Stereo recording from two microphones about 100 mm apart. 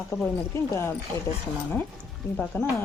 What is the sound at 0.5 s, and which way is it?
Speech, 25° left (ahead or behind).